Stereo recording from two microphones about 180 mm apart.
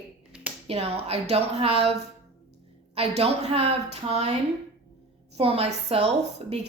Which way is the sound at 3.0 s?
35° right (ahead or behind).